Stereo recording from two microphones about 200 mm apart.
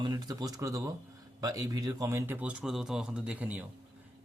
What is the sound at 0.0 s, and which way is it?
Speech, 20° right (ahead or behind).